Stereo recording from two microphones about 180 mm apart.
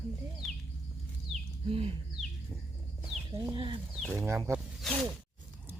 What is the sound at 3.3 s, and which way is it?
Speech, 25° right (ahead or behind).